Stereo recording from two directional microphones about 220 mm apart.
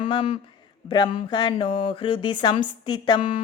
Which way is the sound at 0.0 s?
20° left (ahead or behind).